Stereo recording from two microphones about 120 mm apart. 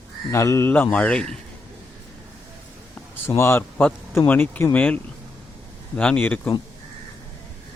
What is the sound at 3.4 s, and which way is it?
Speech, 20° left (ahead or behind).